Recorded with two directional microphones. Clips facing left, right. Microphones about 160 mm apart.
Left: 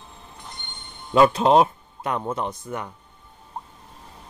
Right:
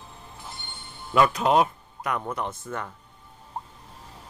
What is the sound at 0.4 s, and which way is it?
Train wheels squealing, 5° right (ahead or behind).